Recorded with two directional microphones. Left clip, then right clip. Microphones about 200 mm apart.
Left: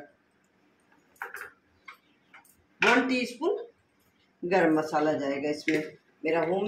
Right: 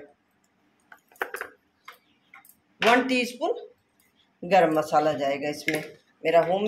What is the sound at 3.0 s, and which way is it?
A woman's voice, 55° right (ahead or behind).